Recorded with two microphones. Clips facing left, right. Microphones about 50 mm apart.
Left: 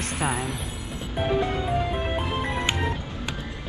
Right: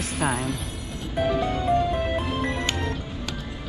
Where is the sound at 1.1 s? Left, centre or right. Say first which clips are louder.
Right 1 dB; centre.